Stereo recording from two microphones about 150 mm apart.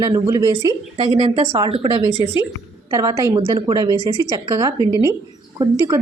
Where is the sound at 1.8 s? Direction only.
25° right (ahead or behind).